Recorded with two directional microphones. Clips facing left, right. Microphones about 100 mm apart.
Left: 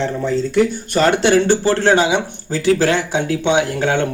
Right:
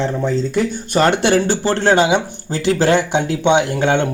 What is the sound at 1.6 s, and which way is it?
Speech, 20° right (ahead or behind).